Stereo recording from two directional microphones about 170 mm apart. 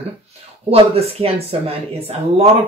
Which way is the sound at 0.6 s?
35° right (ahead or behind).